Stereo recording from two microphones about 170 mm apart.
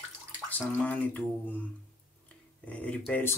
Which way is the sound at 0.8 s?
10° left (ahead or behind).